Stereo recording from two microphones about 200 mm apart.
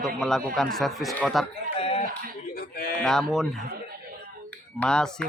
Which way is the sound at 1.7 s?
30° left (ahead or behind).